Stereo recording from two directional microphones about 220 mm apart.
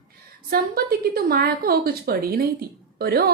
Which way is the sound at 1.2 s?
45° right (ahead or behind).